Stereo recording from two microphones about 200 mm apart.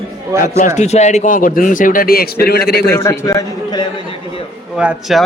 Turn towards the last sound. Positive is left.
turn(degrees=0)  # may be behind; listen again after turning